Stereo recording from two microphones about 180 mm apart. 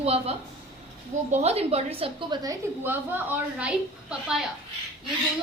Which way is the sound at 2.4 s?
10° right (ahead or behind).